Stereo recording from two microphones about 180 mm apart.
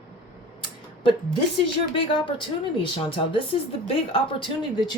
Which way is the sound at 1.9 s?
30° left (ahead or behind).